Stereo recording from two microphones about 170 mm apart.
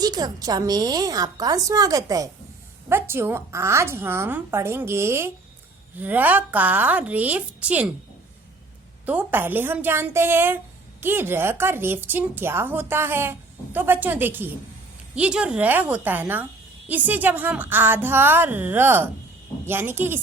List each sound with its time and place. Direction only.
0.0 s a woman's voice: 25° right (ahead or behind)
9.0 s a woman's voice: 10° right (ahead or behind)